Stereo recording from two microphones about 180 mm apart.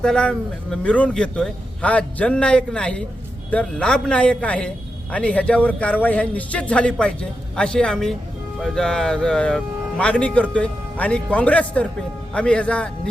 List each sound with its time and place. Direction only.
0.0 s a man's voice: 5° left (ahead or behind)